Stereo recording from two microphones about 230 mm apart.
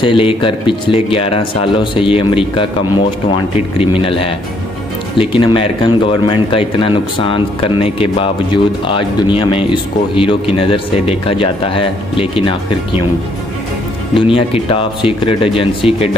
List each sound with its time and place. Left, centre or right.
0.0 s speech: left
14.1 s speech: left